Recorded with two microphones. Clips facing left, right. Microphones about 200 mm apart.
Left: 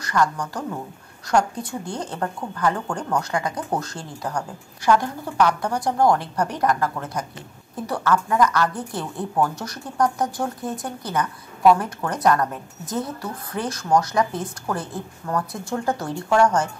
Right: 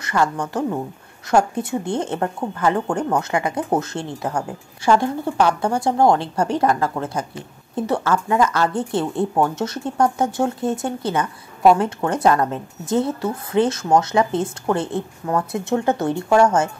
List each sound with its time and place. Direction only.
0.0 s speech: 25° right (ahead or behind)